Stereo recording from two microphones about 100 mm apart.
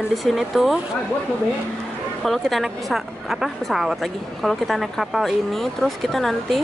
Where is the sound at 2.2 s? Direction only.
Centre (ahead or behind).